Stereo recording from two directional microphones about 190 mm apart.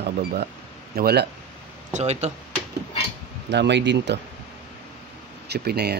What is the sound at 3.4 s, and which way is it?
Speech, 65° right (ahead or behind).